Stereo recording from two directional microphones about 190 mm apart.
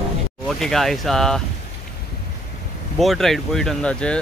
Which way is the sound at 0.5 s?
Centre (ahead or behind).